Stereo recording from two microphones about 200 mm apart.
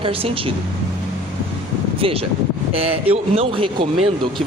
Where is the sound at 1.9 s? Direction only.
30° right (ahead or behind).